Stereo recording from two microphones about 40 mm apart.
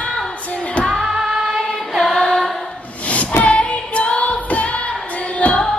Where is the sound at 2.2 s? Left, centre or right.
Centre.